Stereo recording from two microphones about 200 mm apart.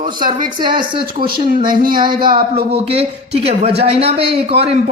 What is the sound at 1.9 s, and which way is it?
A man's voice, 25° right (ahead or behind).